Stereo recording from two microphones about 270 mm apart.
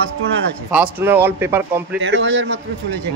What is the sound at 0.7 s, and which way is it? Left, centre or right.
Speech, centre.